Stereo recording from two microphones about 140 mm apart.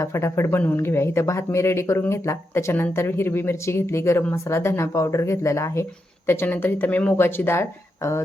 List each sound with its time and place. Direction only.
0.0 s speech: 20° left (ahead or behind)